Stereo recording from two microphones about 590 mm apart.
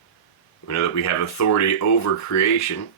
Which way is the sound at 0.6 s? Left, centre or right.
Left.